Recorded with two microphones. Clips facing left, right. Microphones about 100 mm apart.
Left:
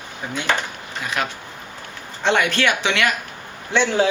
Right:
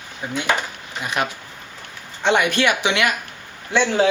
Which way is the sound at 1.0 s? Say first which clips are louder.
Right 2 dB; 20° right (ahead or behind).